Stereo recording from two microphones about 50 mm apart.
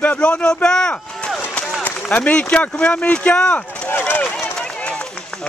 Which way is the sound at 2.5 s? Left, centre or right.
Left.